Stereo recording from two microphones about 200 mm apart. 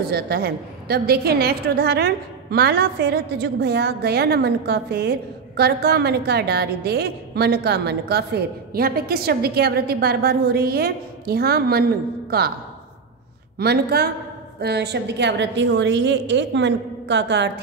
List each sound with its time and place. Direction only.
0.1 s a woman's voice: 50° right (ahead or behind)
13.6 s a woman's voice: 50° right (ahead or behind)